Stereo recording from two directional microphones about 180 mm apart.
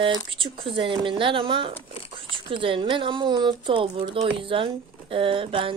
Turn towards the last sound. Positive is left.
turn(degrees=-30)  # may be behind; listen again after turning